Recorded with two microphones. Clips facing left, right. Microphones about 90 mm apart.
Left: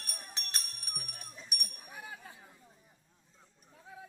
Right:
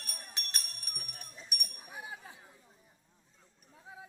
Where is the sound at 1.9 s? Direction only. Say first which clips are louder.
Right 2 dB; 15° right (ahead or behind).